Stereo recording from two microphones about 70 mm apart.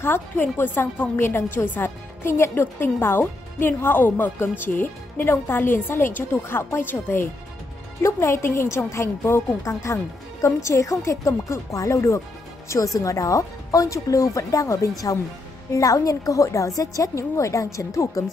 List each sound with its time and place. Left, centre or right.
0.0 s a woman's voice: left
8.0 s a woman's voice: left
10.4 s speech: left